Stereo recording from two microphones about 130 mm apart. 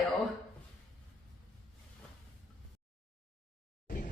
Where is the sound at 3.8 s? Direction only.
90° left.